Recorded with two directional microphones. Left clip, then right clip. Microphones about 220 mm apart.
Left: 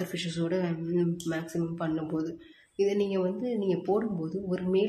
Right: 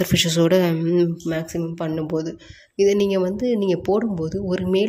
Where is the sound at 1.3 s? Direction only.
35° right (ahead or behind).